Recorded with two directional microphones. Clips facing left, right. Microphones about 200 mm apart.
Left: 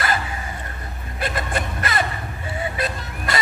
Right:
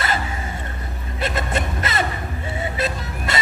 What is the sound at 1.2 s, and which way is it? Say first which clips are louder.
Music: right 2 dB; 25° right (ahead or behind).